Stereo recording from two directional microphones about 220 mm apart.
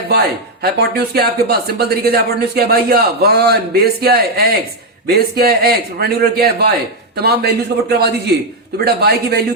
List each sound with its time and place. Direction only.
0.1 s speech: 45° right (ahead or behind)